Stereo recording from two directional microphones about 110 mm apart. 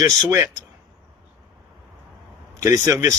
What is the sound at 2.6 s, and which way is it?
Speech, 30° right (ahead or behind).